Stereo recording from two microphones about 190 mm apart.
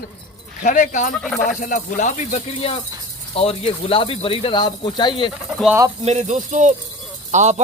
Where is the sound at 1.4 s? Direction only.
40° left (ahead or behind); by 5.3 s 25° left (ahead or behind).